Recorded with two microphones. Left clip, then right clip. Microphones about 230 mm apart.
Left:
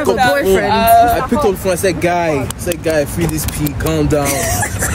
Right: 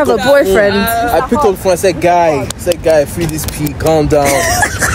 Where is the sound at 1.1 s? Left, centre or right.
Centre.